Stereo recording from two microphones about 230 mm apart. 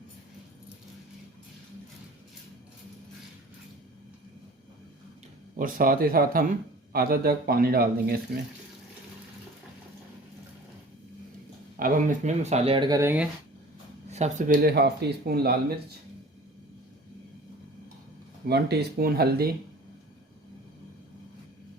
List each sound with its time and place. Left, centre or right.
5.5 s a man's voice: right
11.8 s speech: right; by 13.2 s centre
14.1 s speech: right
18.4 s speech: right